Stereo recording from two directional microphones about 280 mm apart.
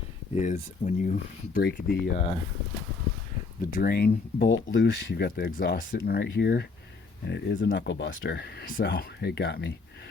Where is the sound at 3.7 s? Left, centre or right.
Left.